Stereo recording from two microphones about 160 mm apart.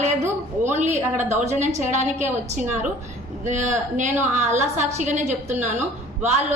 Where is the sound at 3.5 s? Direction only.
50° right (ahead or behind).